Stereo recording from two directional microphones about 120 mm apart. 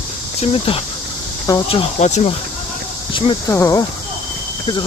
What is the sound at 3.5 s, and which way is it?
Speech, 25° left (ahead or behind).